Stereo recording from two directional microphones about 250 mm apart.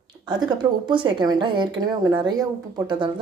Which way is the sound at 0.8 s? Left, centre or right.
Centre.